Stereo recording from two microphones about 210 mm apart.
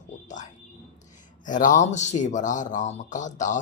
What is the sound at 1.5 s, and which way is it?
Speech, 40° left (ahead or behind).